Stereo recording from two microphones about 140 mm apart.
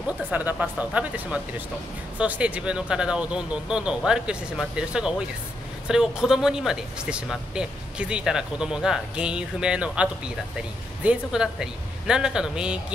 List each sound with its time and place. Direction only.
0.3 s speech: 10° right (ahead or behind)